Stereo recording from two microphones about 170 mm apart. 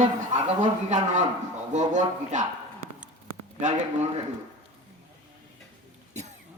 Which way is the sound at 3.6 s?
45° right (ahead or behind).